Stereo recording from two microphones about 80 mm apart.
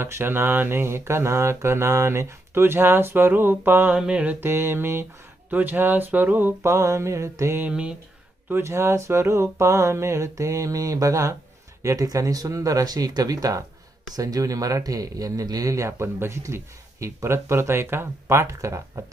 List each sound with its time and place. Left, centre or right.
0.0 s speech: right
3.9 s mantra: centre
4.4 s speech: right
6.7 s speech: right
7.7 s mantra: centre
8.4 s speech: right